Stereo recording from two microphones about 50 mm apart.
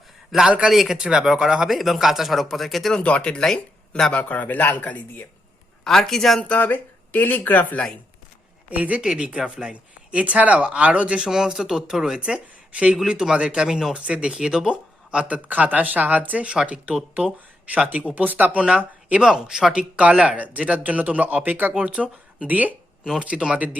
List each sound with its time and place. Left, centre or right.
0.3 s a man's voice: centre
1.7 s a man's voice: centre
2.9 s speech: left
4.1 s speech: left
5.8 s a man's voice: centre
6.6 s speech: left
8.7 s speech: right
11.3 s speech: centre
13.7 s speech: centre
13.9 s speech: right
19.2 s speech: centre
20.0 s speech: right
21.8 s speech: right
23.2 s speech: right